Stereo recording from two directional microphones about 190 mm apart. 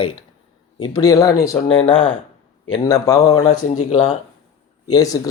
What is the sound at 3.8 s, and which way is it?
Speech, 35° left (ahead or behind).